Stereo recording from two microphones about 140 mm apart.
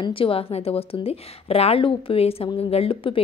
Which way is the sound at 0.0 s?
40° left (ahead or behind).